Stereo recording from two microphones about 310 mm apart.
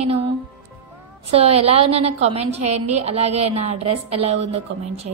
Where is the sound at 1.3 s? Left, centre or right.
Centre.